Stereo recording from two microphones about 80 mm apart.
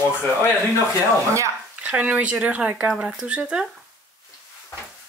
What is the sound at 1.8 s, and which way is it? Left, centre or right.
Speech, centre.